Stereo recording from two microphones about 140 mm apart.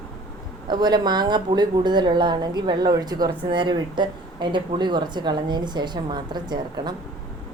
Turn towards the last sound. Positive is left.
turn(degrees=-30)  # may be behind; listen again after turning